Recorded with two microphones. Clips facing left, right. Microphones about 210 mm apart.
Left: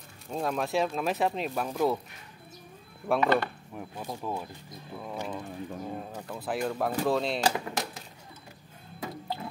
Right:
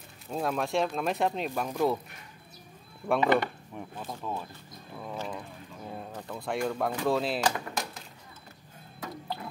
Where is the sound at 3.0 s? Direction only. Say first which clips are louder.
Even; 5° left (ahead or behind).